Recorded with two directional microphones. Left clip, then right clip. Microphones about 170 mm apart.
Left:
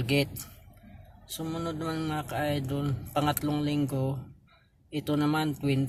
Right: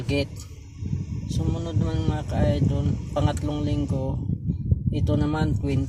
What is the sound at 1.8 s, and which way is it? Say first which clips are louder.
Speech: right 2 dB; 15° left (ahead or behind).